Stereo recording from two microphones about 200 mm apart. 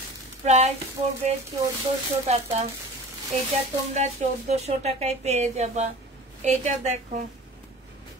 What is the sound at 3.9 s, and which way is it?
Speech, 35° right (ahead or behind).